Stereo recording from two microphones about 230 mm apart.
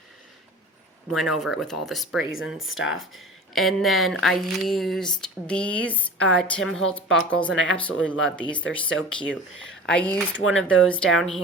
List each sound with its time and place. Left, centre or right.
1.1 s speech: centre
7.5 s speech: left
8.0 s speech: centre